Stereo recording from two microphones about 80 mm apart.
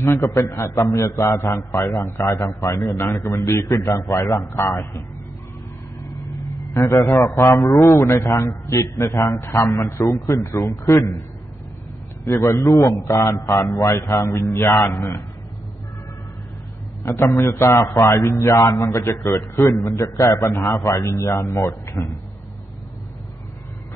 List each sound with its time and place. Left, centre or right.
0.0 s a man's voice: left
6.0 s vehicle: left
7.5 s a man's voice: left
12.3 s a man's voice: left
17.0 s a man's voice: left
22.0 s speech: centre